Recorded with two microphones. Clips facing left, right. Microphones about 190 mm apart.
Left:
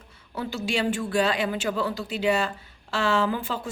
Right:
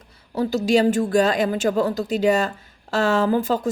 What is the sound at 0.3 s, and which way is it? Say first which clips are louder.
Speech: right 9 dB; 40° right (ahead or behind).